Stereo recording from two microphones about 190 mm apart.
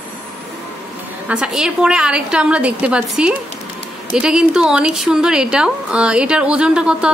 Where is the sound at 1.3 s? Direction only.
5° right (ahead or behind).